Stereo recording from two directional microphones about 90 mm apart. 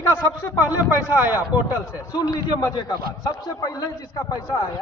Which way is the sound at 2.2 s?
45° left (ahead or behind).